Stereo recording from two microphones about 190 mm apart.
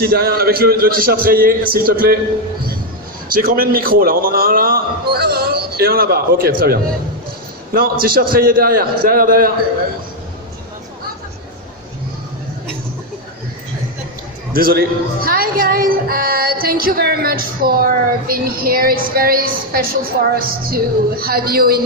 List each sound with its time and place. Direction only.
0.0 s speech: 55° right (ahead or behind)
3.2 s a man's voice: 50° right (ahead or behind)
14.5 s speech: 50° right (ahead or behind)